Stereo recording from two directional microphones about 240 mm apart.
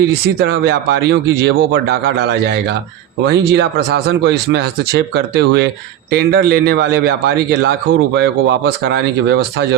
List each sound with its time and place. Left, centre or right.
0.1 s a man's voice: right